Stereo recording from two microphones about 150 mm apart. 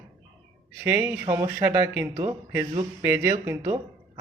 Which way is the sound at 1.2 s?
25° right (ahead or behind).